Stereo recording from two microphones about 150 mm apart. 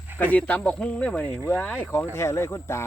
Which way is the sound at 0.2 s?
10° left (ahead or behind).